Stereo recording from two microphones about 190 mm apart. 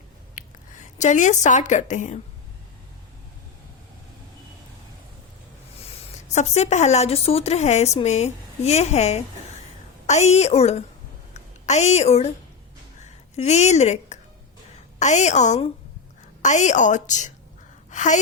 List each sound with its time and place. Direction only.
0.3 s speech: 40° left (ahead or behind)
5.8 s a woman's voice: 35° left (ahead or behind)
17.9 s gasp: 40° left (ahead or behind)